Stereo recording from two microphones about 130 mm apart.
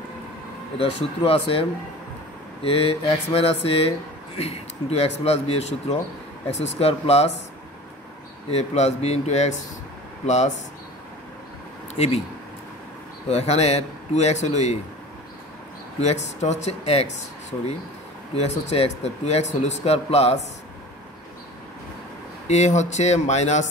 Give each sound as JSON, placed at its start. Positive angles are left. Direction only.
{"t": 0.7, "sound": "speech", "side_deg": 50}
{"t": 8.5, "sound": "speech", "side_deg": 60}
{"t": 11.9, "sound": "speech", "side_deg": 55}
{"t": 13.3, "sound": "speech", "side_deg": 55}
{"t": 16.0, "sound": "speech", "side_deg": 55}
{"t": 22.5, "sound": "speech", "side_deg": 60}